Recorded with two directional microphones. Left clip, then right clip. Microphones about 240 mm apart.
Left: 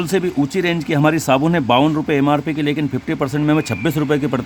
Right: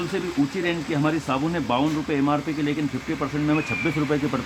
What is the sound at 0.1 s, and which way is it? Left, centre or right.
Speech, left.